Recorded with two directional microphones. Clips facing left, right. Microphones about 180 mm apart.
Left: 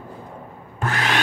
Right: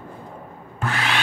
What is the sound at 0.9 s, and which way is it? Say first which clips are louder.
Wood: left 2 dB; 45° left (ahead or behind).